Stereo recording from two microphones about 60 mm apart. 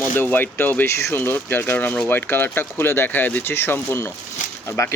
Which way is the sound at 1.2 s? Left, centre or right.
Left.